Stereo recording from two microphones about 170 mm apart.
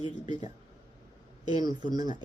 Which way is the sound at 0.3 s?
25° right (ahead or behind).